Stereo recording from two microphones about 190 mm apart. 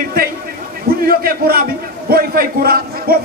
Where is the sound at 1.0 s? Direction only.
50° right (ahead or behind).